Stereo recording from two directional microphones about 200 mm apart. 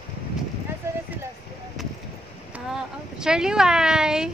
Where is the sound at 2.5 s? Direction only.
5° right (ahead or behind).